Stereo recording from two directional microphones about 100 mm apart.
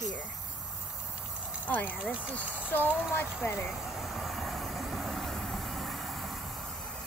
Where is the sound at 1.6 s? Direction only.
20° left (ahead or behind).